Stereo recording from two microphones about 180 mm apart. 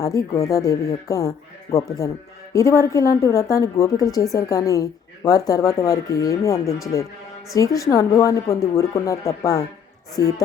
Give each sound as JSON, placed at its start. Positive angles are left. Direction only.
{"t": 0.0, "sound": "a woman's voice", "side_deg": 20}